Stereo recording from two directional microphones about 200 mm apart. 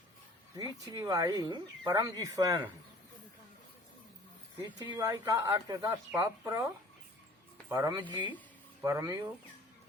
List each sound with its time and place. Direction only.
0.5 s speech: 20° right (ahead or behind)
4.6 s speech: 20° right (ahead or behind)
7.7 s speech: 20° right (ahead or behind)